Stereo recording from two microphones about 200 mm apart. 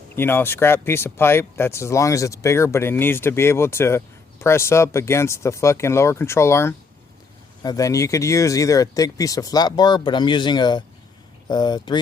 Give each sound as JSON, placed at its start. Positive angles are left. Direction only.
{"t": 0.2, "sound": "speech", "side_deg": 10}